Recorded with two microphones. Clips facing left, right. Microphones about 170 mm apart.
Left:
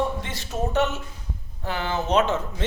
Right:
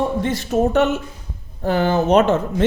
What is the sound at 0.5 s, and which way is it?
Speech, 55° right (ahead or behind).